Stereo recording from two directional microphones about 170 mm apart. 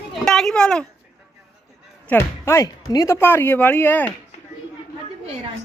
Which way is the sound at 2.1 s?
15° left (ahead or behind).